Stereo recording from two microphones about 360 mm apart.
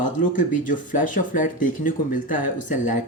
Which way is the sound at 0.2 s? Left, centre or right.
Left.